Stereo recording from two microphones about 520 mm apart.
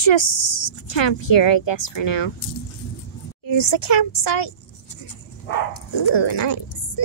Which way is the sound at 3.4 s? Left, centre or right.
Left.